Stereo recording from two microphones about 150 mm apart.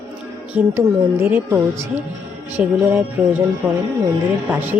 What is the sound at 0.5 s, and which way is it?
Speech, 15° right (ahead or behind).